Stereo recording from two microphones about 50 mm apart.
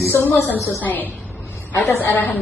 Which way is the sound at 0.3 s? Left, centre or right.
Left.